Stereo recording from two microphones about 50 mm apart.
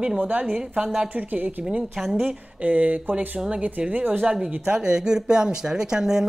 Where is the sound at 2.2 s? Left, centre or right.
Right.